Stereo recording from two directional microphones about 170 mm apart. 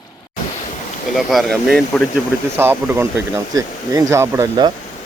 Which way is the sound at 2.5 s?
15° right (ahead or behind).